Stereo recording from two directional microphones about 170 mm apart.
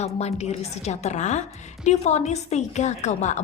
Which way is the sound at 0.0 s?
40° left (ahead or behind).